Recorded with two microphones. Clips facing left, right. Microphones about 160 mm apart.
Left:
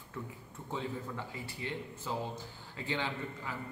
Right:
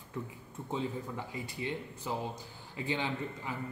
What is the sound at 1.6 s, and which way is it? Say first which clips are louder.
A man's voice: right 2 dB; 15° right (ahead or behind).